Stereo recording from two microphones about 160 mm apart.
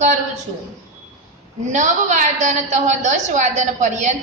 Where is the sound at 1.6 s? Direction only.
50° right (ahead or behind).